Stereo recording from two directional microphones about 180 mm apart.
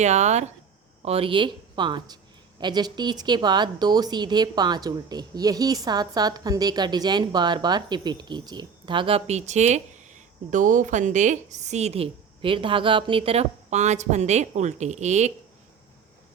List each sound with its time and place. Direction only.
0.0 s speech: 40° right (ahead or behind)